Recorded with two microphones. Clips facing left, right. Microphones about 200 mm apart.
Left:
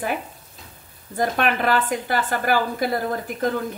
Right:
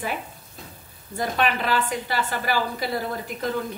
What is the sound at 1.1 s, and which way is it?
A woman's voice, 50° left (ahead or behind).